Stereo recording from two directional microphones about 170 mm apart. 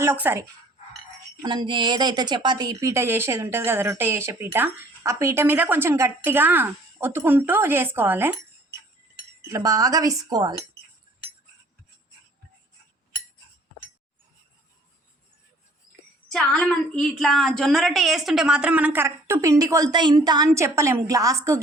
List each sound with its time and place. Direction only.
0.0 s speech: 15° right (ahead or behind)
1.4 s speech: 25° right (ahead or behind); by 8.4 s 10° right (ahead or behind)
9.5 s speech: 20° right (ahead or behind)
16.3 s speech: centre (ahead or behind); by 21.6 s 20° right (ahead or behind)